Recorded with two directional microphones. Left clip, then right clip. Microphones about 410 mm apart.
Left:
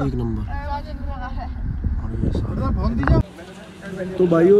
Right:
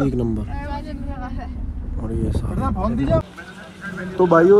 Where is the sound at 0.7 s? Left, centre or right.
Left.